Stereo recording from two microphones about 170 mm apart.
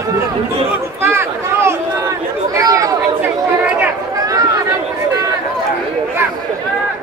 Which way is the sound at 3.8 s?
20° right (ahead or behind).